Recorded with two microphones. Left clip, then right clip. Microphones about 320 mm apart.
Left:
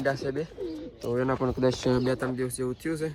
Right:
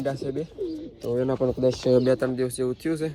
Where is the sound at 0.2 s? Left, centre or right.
Centre.